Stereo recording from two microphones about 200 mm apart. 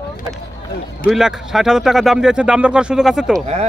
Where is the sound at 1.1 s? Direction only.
Centre (ahead or behind).